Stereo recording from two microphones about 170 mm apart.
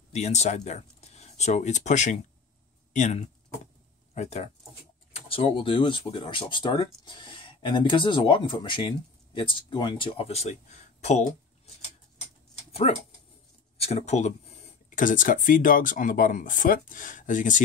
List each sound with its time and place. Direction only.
0.1 s speech: 40° left (ahead or behind)
13.7 s speech: 40° left (ahead or behind)